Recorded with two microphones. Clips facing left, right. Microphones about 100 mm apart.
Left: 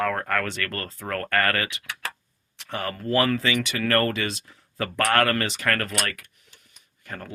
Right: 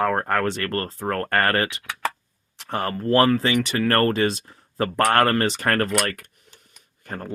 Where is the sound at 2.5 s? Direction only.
45° right (ahead or behind).